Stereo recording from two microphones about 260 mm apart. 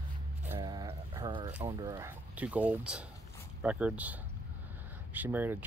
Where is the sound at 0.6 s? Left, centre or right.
Centre.